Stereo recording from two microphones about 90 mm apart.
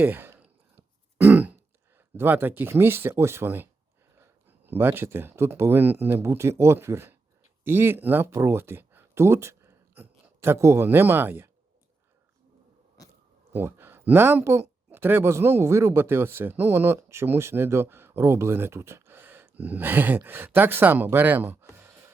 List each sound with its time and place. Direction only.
0.0 s a sound: 25° right (ahead or behind)
0.4 s throat clearing: 20° right (ahead or behind)
2.0 s speech: 25° right (ahead or behind)
13.5 s speech: 25° right (ahead or behind)